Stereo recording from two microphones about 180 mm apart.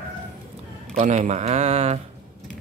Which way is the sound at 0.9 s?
40° right (ahead or behind).